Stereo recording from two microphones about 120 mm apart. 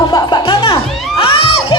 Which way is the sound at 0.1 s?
35° left (ahead or behind).